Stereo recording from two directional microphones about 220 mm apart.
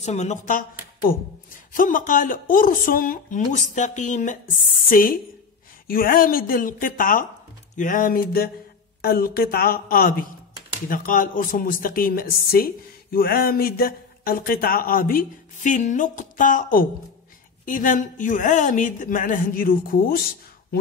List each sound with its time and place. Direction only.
0.0 s speech: 30° left (ahead or behind)